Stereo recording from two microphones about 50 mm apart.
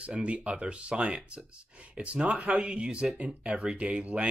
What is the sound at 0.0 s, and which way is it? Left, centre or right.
Speech, right.